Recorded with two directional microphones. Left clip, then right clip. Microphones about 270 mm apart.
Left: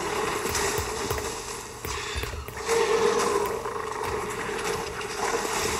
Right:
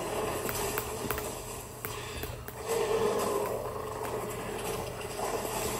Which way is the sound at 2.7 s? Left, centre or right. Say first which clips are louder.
Left 6 dB; centre.